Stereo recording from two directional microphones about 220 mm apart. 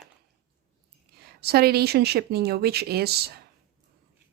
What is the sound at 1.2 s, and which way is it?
A woman's voice, 45° right (ahead or behind).